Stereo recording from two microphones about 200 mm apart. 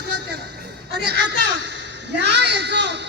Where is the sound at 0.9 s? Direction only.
55° right (ahead or behind).